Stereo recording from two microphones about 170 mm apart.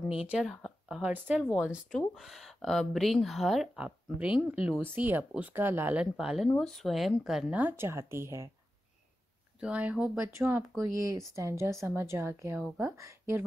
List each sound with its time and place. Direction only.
0.3 s speech: centre (ahead or behind)
9.6 s speech: 10° right (ahead or behind)